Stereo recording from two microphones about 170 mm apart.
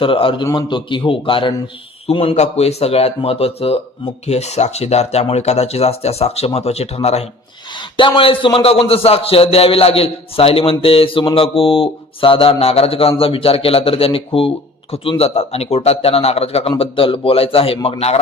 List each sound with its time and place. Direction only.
0.0 s a man's voice: 30° left (ahead or behind)